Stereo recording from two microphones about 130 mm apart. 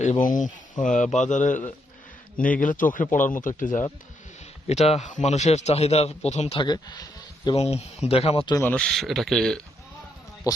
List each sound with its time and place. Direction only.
0.0 s speech: 80° left
2.6 s speech: 90° left
4.6 s speech: 55° left (ahead or behind)
6.6 s speech: 35° left (ahead or behind)
7.5 s speech: 50° left (ahead or behind)
8.6 s speech: 10° left (ahead or behind)
10.5 s speech: 25° left (ahead or behind)